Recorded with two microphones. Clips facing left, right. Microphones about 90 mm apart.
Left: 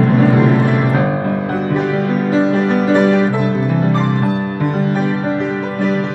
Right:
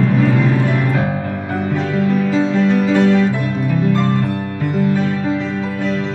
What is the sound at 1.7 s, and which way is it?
Music, 15° left (ahead or behind).